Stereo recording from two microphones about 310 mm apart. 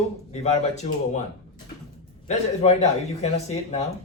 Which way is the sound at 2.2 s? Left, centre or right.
Left.